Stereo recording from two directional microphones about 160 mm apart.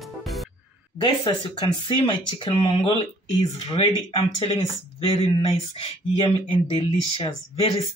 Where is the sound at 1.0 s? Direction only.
30° left (ahead or behind).